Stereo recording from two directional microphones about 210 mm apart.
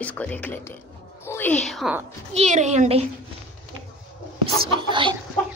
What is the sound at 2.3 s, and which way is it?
Speech, 35° right (ahead or behind).